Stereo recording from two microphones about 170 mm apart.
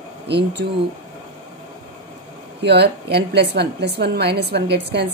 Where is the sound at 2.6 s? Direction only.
75° right (ahead or behind).